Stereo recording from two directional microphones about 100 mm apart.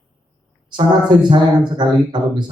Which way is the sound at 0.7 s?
50° right (ahead or behind).